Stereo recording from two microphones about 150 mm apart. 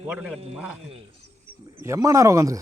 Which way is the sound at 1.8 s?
20° right (ahead or behind).